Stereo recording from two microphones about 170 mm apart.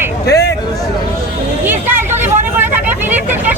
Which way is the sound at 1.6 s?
10° right (ahead or behind).